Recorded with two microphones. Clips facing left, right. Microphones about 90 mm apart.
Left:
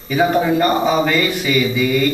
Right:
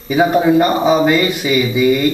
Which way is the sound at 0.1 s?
15° right (ahead or behind).